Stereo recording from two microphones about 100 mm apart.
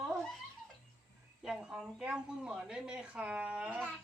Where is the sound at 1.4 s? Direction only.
5° right (ahead or behind).